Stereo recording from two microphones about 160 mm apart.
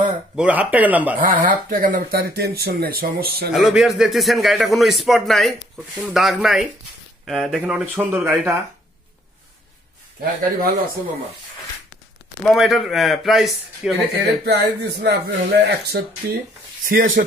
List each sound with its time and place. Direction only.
0.4 s speech: 10° right (ahead or behind)
1.1 s speech: 60° right (ahead or behind); by 3.5 s 75° right (ahead or behind)
3.5 s a man's voice: centre (ahead or behind)
12.4 s a man's voice: centre (ahead or behind)
14.4 s speech: 90° right
16.2 s speech: 70° right (ahead or behind)
16.9 s speech: 60° right (ahead or behind)